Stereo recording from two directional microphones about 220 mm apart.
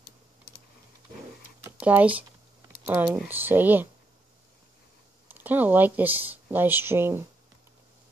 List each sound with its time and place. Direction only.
1.6 s a sound: 5° right (ahead or behind)
2.8 s speech: 10° right (ahead or behind)
5.3 s speech: 10° right (ahead or behind)